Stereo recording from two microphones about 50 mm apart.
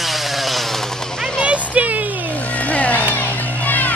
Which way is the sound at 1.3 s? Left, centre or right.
Right.